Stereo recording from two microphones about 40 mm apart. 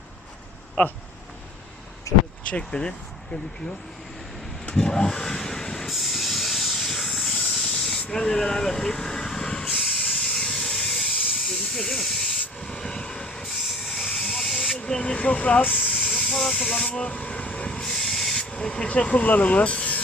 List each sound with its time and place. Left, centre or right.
0.8 s speech: left
2.5 s speech: left
4.8 s vehicle: centre
5.8 s hiss: centre; by 8.0 s left
8.1 s speech: centre
9.6 s train: left
13.8 s hiss: centre
14.9 s speech: left
16.0 s hiss: left
17.0 s vehicle: left
17.7 s train: centre
18.1 s hiss: centre
18.5 s speech: left